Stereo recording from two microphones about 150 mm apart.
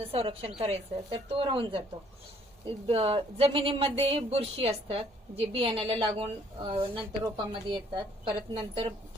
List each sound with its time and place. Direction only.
0.1 s a woman's voice: 40° right (ahead or behind)
2.8 s a woman's voice: 40° right (ahead or behind)